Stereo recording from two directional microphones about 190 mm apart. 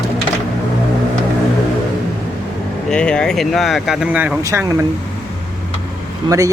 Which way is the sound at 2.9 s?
5° left (ahead or behind).